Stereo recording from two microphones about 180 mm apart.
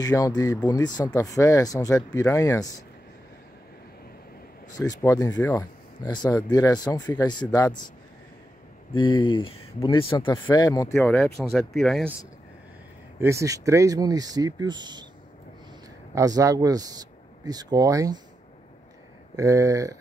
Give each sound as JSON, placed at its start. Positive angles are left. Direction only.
{"t": 0.0, "sound": "speech", "side_deg": 20}
{"t": 4.7, "sound": "speech", "side_deg": 20}
{"t": 8.9, "sound": "speech", "side_deg": 25}
{"t": 10.2, "sound": "speech", "side_deg": 15}
{"t": 10.9, "sound": "speech", "side_deg": 5}
{"t": 13.2, "sound": "speech", "side_deg": -15}
{"t": 16.2, "sound": "speech", "side_deg": -20}
{"t": 19.3, "sound": "speech", "side_deg": -15}